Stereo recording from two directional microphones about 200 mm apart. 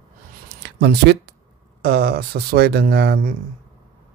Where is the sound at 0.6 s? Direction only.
55° right (ahead or behind).